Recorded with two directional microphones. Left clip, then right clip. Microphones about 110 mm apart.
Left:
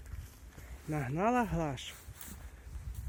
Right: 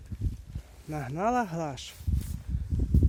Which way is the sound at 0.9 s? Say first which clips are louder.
Right 3 dB; 10° right (ahead or behind).